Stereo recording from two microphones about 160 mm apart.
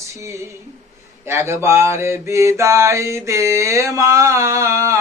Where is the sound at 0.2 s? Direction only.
15° right (ahead or behind).